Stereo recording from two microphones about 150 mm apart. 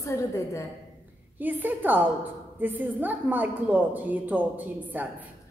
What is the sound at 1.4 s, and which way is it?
A woman's voice, 10° right (ahead or behind).